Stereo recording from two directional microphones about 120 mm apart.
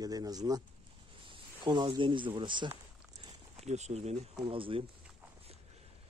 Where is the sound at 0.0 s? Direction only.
30° right (ahead or behind).